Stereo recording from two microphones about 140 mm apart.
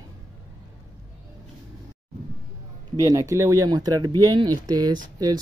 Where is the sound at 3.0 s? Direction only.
25° right (ahead or behind).